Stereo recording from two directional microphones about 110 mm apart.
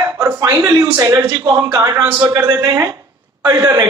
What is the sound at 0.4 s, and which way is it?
Speech, 35° right (ahead or behind).